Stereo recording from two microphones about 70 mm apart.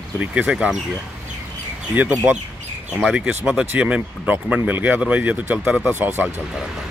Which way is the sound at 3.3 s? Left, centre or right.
Right.